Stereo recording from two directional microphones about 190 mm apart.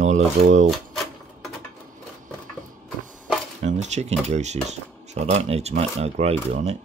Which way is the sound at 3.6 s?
35° right (ahead or behind).